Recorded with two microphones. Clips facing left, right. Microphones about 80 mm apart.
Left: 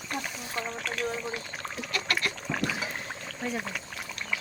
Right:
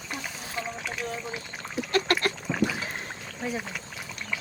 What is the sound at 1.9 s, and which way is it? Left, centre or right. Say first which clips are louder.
Pig: right 6 dB; right.